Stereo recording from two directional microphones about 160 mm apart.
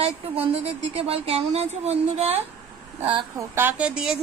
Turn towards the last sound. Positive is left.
turn(degrees=-5)  # may be behind; listen again after turning